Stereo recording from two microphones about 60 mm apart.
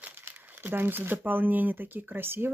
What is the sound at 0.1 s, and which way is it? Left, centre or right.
Speech, right.